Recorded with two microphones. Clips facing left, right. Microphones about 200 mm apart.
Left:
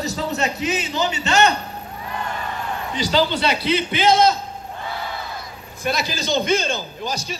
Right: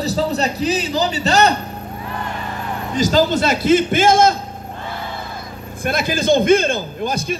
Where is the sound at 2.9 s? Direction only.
45° right (ahead or behind).